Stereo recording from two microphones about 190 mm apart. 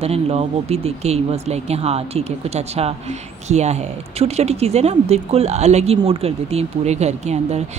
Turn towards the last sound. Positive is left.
turn(degrees=-35)  # may be behind; listen again after turning